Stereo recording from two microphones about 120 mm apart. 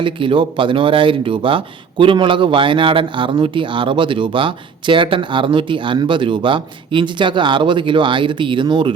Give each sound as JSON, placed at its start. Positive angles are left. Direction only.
{"t": 0.0, "sound": "speech", "side_deg": -45}